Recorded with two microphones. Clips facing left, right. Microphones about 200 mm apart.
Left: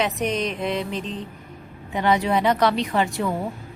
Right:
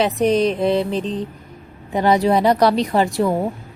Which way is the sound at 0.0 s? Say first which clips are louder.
Right 8 dB; 35° right (ahead or behind).